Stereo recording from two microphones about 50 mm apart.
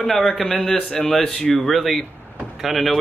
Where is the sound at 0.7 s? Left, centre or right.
Centre.